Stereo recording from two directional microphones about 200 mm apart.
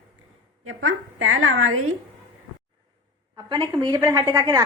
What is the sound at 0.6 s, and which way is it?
A woman's voice, 90° right.